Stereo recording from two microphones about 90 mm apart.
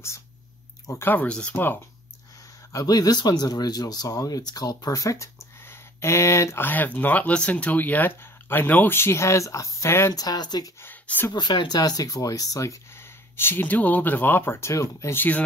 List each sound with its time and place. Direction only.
0.8 s speech: 30° left (ahead or behind)
1.1 s speech: 15° left (ahead or behind)
2.7 s speech: 45° left (ahead or behind); by 10.1 s 30° left (ahead or behind)
10.1 s speech: 45° left (ahead or behind)
10.8 s speech: 20° left (ahead or behind)
11.3 s speech: 55° left (ahead or behind); by 15.1 s 35° left (ahead or behind)
15.1 s speech: 20° left (ahead or behind)